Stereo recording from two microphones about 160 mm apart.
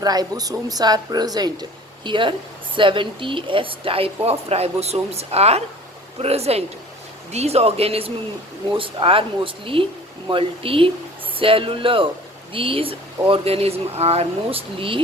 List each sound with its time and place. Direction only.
0.0 s a woman's voice: 25° right (ahead or behind)